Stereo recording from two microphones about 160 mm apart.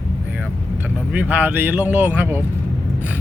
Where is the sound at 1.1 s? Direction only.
10° right (ahead or behind).